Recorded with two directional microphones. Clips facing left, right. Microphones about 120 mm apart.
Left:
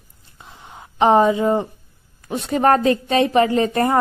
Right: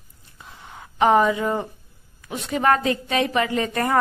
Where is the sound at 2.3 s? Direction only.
35° left (ahead or behind).